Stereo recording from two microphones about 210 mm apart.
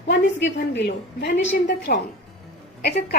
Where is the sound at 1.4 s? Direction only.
40° left (ahead or behind).